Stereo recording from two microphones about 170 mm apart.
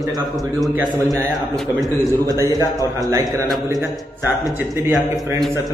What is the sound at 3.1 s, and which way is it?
Speech, 20° right (ahead or behind).